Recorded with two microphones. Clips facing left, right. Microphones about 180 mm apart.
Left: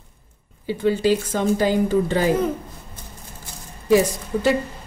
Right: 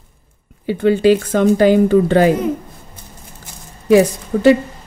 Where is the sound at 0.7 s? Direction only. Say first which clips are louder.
Right 6 dB; 65° right (ahead or behind).